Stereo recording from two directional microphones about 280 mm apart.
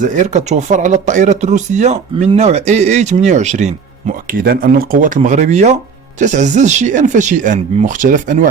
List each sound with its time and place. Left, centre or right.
0.1 s speech: right